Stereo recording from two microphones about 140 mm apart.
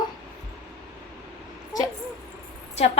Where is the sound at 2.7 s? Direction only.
50° left (ahead or behind).